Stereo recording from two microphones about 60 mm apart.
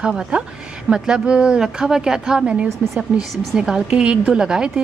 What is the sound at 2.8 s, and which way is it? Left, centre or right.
Speech, right.